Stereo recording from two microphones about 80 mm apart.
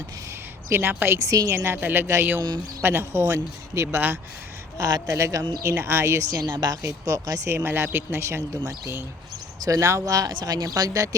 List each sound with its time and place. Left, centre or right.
0.7 s speech: right
1.2 s speech: right
1.5 s a man's voice: right
4.8 s speech: right
5.1 s a man's voice: right
7.5 s a man's voice: right